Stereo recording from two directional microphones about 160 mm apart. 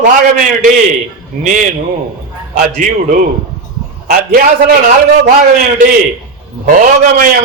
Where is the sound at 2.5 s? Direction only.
55° right (ahead or behind).